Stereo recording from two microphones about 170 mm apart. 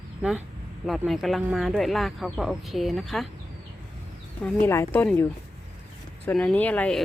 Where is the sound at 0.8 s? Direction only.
Centre (ahead or behind).